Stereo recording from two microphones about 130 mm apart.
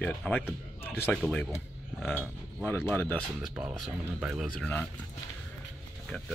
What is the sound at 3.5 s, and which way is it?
Speech, 5° right (ahead or behind).